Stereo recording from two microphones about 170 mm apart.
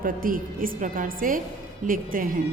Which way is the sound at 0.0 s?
55° right (ahead or behind).